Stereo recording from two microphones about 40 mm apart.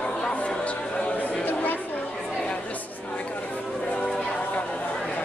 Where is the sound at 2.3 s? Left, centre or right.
Left.